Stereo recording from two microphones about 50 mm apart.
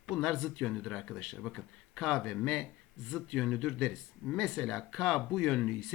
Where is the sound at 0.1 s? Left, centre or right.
Centre.